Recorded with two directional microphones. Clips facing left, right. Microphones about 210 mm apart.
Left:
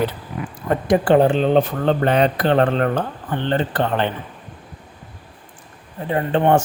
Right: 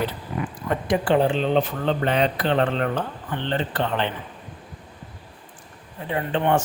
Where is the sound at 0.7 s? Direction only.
45° left (ahead or behind).